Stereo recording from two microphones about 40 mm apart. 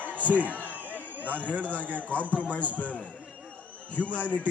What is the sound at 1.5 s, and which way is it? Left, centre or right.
A man's voice, left.